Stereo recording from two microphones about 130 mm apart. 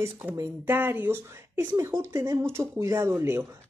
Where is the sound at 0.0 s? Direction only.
15° right (ahead or behind).